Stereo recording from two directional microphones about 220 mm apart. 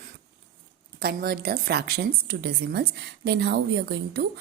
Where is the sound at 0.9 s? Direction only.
45° right (ahead or behind).